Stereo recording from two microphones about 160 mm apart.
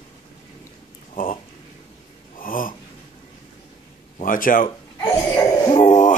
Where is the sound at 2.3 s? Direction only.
60° left (ahead or behind).